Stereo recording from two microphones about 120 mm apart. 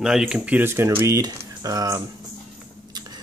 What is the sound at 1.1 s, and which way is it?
Speech, 30° right (ahead or behind).